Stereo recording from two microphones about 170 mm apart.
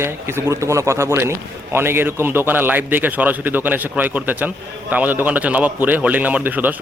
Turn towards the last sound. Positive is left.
turn(degrees=-10)  # may be behind; listen again after turning